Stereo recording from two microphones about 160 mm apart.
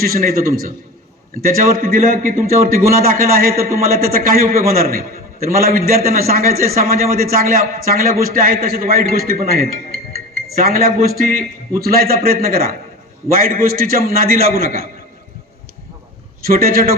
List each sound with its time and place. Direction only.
0.0 s a man's voice: 65° right (ahead or behind)
16.5 s a man's voice: 65° right (ahead or behind)